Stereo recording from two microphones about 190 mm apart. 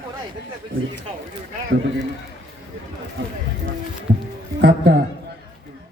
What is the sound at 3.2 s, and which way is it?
Speech, 80° right.